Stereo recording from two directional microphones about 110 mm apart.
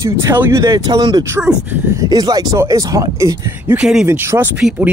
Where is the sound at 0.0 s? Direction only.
20° right (ahead or behind).